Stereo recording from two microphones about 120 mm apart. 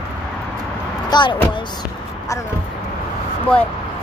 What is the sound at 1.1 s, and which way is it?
Speech, 35° left (ahead or behind).